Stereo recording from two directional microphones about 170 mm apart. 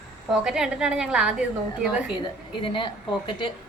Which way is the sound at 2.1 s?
30° left (ahead or behind).